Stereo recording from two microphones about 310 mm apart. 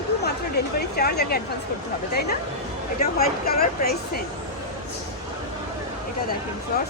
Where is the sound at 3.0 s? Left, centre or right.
Left.